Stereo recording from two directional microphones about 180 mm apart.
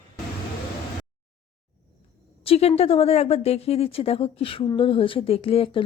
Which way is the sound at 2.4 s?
35° left (ahead or behind).